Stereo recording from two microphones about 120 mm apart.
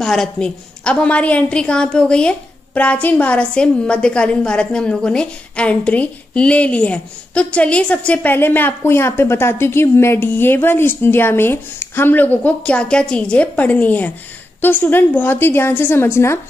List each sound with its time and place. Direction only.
0.0 s a woman's voice: 5° left (ahead or behind); by 16.3 s 20° left (ahead or behind)